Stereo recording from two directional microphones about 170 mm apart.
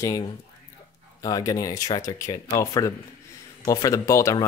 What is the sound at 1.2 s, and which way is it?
Speech, 20° left (ahead or behind).